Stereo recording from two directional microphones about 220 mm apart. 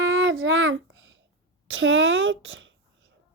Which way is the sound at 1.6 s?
60° right (ahead or behind).